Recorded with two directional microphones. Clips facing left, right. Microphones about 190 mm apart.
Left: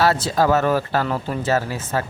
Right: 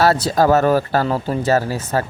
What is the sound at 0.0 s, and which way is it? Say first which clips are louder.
Speech: right 3 dB; 40° right (ahead or behind).